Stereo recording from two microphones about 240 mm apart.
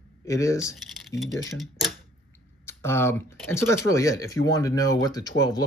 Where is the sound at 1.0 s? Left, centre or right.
Centre.